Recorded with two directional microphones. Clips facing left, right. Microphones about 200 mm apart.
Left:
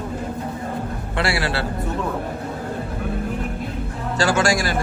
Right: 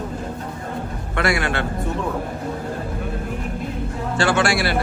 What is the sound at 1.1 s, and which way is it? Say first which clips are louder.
Speech: right 2 dB; 30° left (ahead or behind).